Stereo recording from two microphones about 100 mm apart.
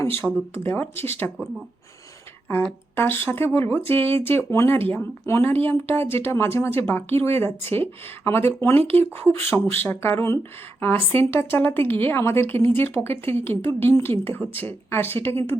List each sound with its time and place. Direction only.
0.2 s a woman's voice: 20° left (ahead or behind)
2.9 s a woman's voice: 25° left (ahead or behind)